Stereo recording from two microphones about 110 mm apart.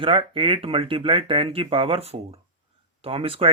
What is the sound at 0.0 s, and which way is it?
Speech, 55° right (ahead or behind).